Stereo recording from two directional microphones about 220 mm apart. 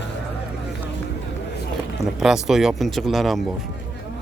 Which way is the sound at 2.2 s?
Centre (ahead or behind).